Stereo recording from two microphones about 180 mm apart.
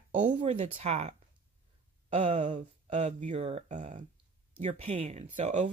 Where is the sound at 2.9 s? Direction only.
40° right (ahead or behind).